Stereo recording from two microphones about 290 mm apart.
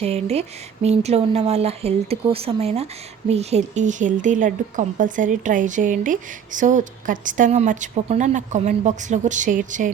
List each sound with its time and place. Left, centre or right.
0.0 s a woman's voice: right